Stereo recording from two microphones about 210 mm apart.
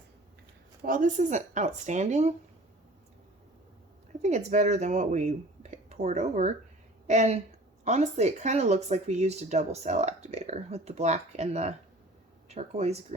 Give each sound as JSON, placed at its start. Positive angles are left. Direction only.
{"t": 0.8, "sound": "speech", "side_deg": -40}
{"t": 4.2, "sound": "speech", "side_deg": -35}